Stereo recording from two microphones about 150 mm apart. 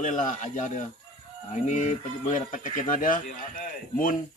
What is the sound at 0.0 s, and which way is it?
A man's voice, 60° left (ahead or behind).